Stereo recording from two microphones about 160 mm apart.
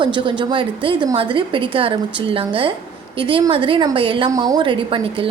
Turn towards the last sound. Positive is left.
turn(degrees=-35)  # may be behind; listen again after turning